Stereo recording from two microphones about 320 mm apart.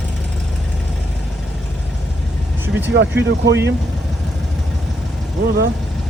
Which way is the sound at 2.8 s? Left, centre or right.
Right.